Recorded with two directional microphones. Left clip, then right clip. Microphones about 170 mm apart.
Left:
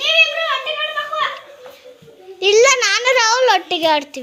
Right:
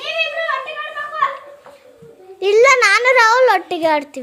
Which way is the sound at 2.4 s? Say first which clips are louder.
Right 1 dB; 10° right (ahead or behind).